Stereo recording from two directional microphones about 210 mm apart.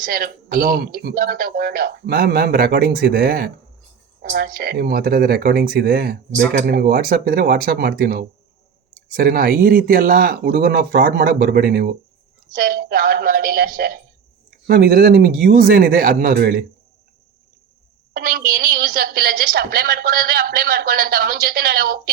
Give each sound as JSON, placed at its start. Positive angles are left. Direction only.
{"t": 0.0, "sound": "speech", "side_deg": -45}
{"t": 18.1, "sound": "speech", "side_deg": -45}